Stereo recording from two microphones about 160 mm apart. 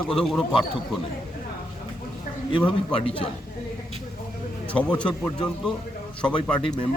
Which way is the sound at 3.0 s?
35° left (ahead or behind).